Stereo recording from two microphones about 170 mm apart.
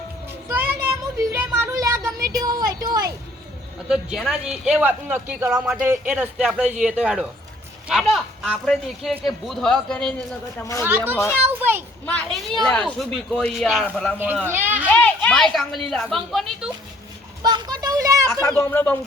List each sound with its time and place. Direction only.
0.4 s a sound: 10° right (ahead or behind)
3.8 s speech: 5° right (ahead or behind)
10.6 s speech: 15° left (ahead or behind)
10.8 s a child's voice: 10° right (ahead or behind)
12.0 s speech: 10° left (ahead or behind)
14.5 s a child's voice: 10° right (ahead or behind)
14.8 s a woman's voice: 10° left (ahead or behind)
17.4 s a sound: 25° right (ahead or behind)
18.4 s speech: 15° left (ahead or behind)